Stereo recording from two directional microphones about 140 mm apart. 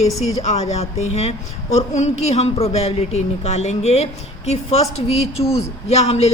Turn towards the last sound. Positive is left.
turn(degrees=45)  # may be behind; listen again after turning